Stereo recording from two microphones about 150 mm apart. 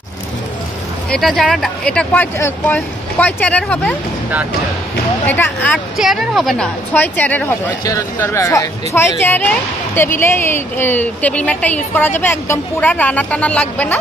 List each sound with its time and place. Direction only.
1.1 s speech: centre (ahead or behind)
5.2 s speech: 10° left (ahead or behind)
5.9 s speech: centre (ahead or behind)